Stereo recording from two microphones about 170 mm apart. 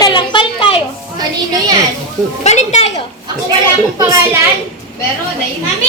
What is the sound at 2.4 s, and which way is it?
Speech, 40° left (ahead or behind).